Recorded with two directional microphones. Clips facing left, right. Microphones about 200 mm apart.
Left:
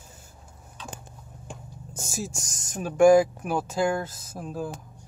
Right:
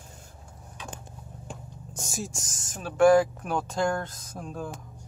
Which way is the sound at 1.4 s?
Centre (ahead or behind).